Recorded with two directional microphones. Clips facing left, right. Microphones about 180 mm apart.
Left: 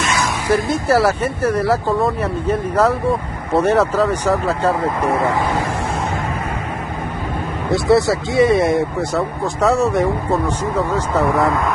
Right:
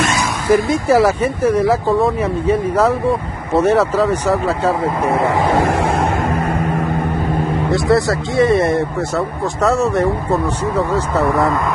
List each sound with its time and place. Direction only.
0.8 s speech: 5° right (ahead or behind)
5.3 s speech: 75° right (ahead or behind)
7.7 s speech: centre (ahead or behind)